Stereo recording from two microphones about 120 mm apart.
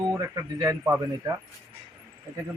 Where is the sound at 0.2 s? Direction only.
25° right (ahead or behind).